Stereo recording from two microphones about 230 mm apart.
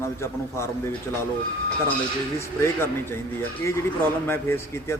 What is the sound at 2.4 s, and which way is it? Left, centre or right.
A man's voice, centre.